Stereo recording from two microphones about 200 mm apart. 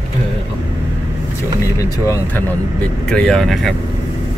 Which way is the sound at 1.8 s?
15° left (ahead or behind).